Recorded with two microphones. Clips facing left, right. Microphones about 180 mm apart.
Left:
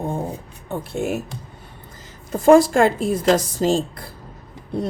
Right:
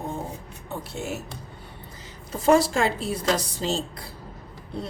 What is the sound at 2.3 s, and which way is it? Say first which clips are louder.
Speech: left 7 dB; 50° left (ahead or behind).